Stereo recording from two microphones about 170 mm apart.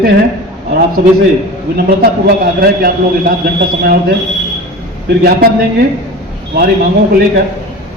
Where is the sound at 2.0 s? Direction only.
60° right (ahead or behind).